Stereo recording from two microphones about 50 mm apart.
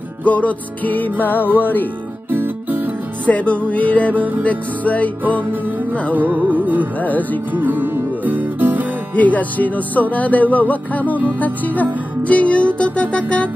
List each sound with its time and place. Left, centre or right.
0.2 s speech: left
1.4 s music: right
3.3 s music: left
6.1 s music: right
7.0 s speech: left
7.5 s music: right
9.1 s speech: left
11.2 s music: left